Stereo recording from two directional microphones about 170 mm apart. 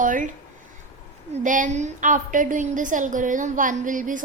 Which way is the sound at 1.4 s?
50° right (ahead or behind).